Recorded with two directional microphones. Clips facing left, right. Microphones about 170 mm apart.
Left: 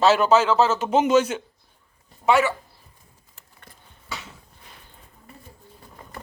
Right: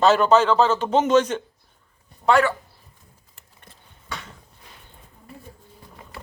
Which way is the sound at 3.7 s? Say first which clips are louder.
Even; 20° right (ahead or behind).